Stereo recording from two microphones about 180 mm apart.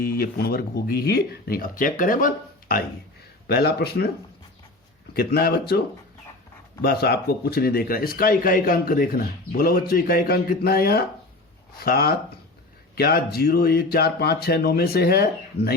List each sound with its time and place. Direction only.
0.0 s speech: 55° left (ahead or behind)
5.1 s speech: 60° left (ahead or behind)
6.8 s speech: 60° left (ahead or behind)